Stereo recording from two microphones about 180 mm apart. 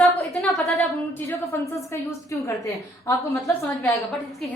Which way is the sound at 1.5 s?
15° left (ahead or behind).